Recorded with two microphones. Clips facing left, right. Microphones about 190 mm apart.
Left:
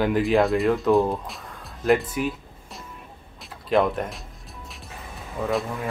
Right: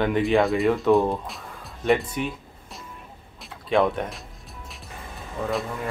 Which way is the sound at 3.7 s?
Centre (ahead or behind).